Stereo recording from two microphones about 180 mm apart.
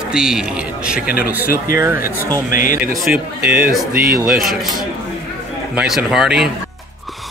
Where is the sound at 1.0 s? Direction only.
55° left (ahead or behind).